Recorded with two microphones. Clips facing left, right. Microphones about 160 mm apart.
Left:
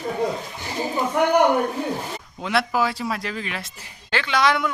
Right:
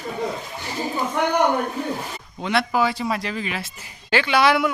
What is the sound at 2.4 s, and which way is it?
Speech, centre (ahead or behind).